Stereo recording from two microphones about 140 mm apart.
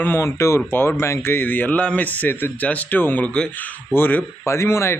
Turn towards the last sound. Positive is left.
turn(degrees=20)  # may be behind; listen again after turning